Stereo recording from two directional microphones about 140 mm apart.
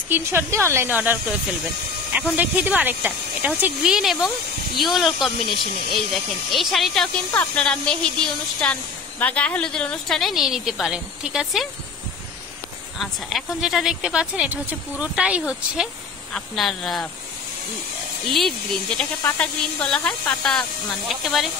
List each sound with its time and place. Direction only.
0.1 s a woman's voice: 15° right (ahead or behind)
13.0 s a woman's voice: centre (ahead or behind)
18.3 s a woman's voice: centre (ahead or behind)